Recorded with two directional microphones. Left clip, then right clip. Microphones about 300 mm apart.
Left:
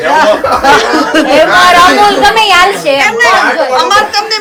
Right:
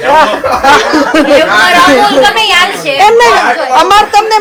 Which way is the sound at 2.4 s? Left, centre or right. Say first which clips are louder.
Left 2 dB; left.